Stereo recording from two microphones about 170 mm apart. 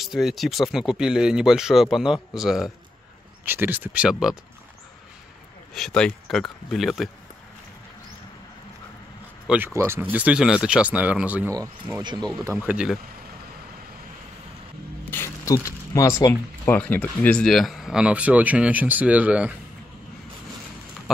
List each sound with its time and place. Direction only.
0.0 s speech: centre (ahead or behind)
5.8 s speech: 5° left (ahead or behind)
9.8 s speech: 15° right (ahead or behind)
11.5 s speech: 20° right (ahead or behind)
12.4 s speech: 10° right (ahead or behind)
15.0 s speech: 15° left (ahead or behind); by 19.5 s 10° right (ahead or behind)